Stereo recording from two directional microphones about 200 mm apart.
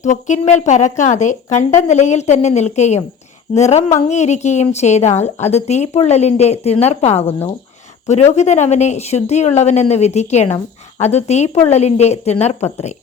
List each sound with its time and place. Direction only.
0.0 s a woman's voice: 35° left (ahead or behind)